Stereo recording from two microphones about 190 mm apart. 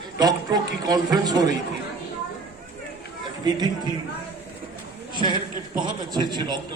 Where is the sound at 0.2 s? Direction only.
20° right (ahead or behind).